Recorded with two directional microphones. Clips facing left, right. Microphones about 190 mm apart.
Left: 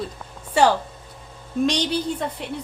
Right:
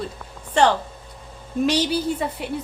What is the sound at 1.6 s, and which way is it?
Speech, 5° right (ahead or behind).